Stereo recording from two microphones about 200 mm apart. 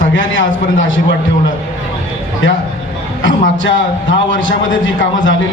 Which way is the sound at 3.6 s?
70° left (ahead or behind).